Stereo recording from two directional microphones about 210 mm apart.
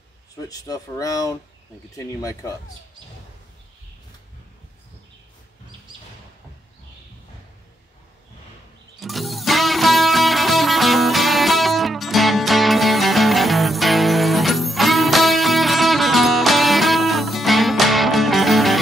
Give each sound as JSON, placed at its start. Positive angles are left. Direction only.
{"t": 0.5, "sound": "speech", "side_deg": 15}
{"t": 9.0, "sound": "music", "side_deg": 0}